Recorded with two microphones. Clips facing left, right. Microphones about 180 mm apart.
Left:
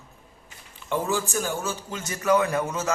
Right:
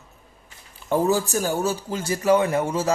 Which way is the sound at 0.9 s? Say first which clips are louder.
Right 6 dB; 40° right (ahead or behind).